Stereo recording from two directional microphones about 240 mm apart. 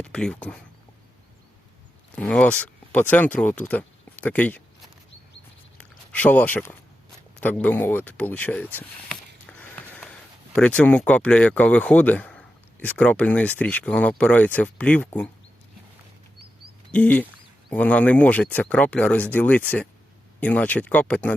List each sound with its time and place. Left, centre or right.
0.0 s speech: centre
2.1 s speech: centre
6.1 s speech: centre
16.9 s speech: centre